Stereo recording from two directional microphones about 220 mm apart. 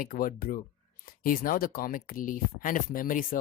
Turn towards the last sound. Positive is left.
turn(degrees=40)  # may be behind; listen again after turning